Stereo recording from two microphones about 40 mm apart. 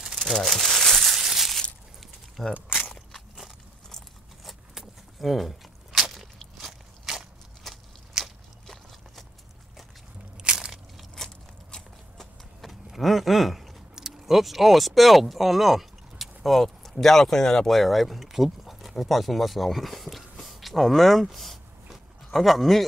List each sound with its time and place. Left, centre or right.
0.3 s crumpling: centre
1.1 s crushing: centre
2.4 s speech: centre
4.5 s a sound: centre
8.2 s biting: centre
10.5 s crushing: centre
11.1 s biting: centre
12.6 s vehicle: centre
13.9 s speech: centre
21.8 s a sound: centre